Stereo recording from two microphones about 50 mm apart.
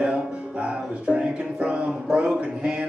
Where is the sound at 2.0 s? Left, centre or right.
Right.